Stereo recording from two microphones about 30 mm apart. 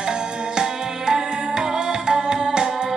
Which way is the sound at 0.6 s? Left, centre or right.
Right.